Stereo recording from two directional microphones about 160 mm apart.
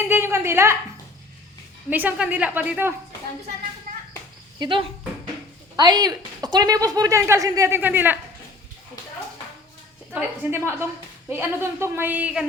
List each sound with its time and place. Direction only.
0.0 s a woman's voice: 15° right (ahead or behind)
1.9 s a woman's voice: 10° right (ahead or behind)
4.6 s speech: 30° right (ahead or behind); by 8.2 s 10° right (ahead or behind)
10.1 s a woman's voice: 15° right (ahead or behind)